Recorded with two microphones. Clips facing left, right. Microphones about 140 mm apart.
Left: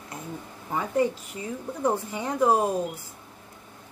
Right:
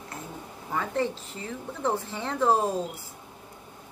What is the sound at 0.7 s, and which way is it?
Speech, 15° left (ahead or behind).